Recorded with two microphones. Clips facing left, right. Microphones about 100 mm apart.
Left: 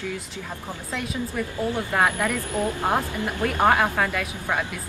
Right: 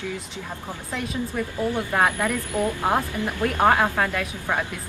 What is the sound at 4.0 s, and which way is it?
Speech, centre (ahead or behind).